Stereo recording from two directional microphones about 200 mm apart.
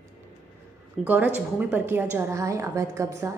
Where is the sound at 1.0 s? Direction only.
10° right (ahead or behind).